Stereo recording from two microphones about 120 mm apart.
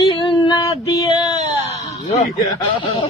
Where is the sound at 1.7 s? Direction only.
65° left (ahead or behind).